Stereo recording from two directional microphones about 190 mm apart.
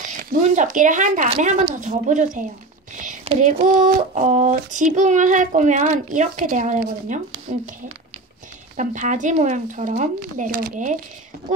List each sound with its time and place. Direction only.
0.0 s speech: 40° right (ahead or behind)
1.3 s child singing: 35° right (ahead or behind)
7.5 s speech: 45° right (ahead or behind)
8.7 s child singing: 40° right (ahead or behind)